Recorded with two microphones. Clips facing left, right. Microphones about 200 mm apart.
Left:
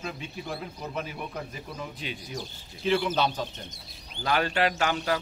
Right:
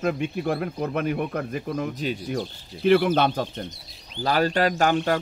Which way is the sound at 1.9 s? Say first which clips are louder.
Right 9 dB; 50° right (ahead or behind).